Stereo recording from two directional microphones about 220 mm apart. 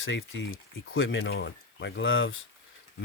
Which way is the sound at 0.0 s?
55° left (ahead or behind).